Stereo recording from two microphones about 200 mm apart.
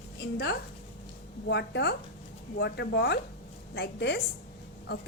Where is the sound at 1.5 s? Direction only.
60° left (ahead or behind).